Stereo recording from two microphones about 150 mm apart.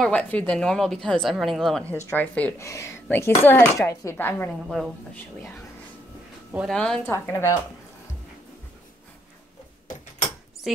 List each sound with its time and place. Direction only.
0.0 s a woman's voice: 10° left (ahead or behind)
2.0 s speech: 15° left (ahead or behind)
4.6 s a woman's voice: centre (ahead or behind)
6.7 s speech: 5° left (ahead or behind)